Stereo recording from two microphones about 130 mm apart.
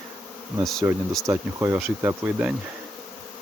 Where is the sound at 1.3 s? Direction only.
15° right (ahead or behind).